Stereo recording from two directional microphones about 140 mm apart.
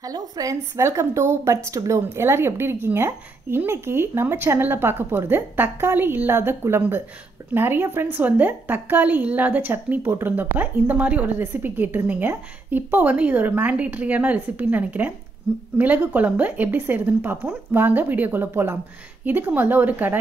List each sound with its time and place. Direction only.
0.0 s a woman's voice: 25° right (ahead or behind)